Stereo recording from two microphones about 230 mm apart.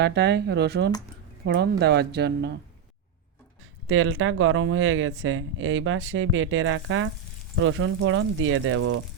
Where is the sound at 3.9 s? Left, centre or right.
Right.